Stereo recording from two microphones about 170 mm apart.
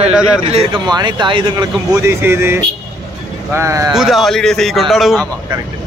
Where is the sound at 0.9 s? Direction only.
25° right (ahead or behind).